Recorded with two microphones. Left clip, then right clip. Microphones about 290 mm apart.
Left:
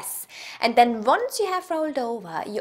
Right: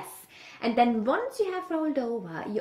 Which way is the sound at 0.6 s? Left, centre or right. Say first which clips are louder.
Left 6 dB; left.